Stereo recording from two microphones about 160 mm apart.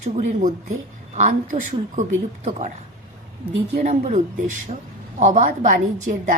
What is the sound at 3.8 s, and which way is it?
A woman's voice, 45° right (ahead or behind).